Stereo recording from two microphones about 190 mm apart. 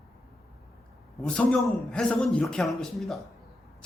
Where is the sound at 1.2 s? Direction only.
5° left (ahead or behind).